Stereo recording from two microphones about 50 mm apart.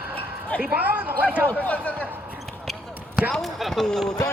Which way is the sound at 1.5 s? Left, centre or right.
Left.